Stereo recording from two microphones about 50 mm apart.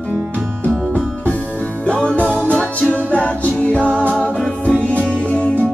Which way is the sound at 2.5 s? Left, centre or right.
Left.